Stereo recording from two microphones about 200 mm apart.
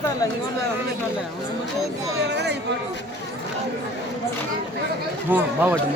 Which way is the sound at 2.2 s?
60° right (ahead or behind).